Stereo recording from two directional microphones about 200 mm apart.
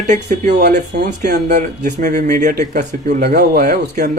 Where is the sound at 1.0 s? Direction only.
50° right (ahead or behind).